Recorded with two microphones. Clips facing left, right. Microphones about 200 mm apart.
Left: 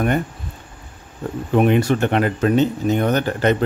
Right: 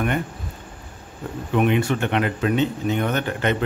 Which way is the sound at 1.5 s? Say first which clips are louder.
Left 4 dB; 40° left (ahead or behind).